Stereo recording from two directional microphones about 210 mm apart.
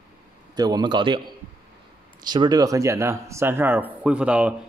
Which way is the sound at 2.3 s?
20° right (ahead or behind).